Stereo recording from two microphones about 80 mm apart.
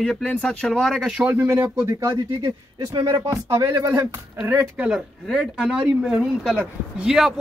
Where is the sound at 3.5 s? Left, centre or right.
Right.